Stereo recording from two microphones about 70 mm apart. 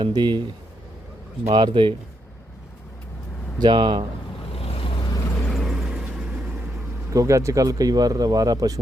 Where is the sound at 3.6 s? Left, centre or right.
Right.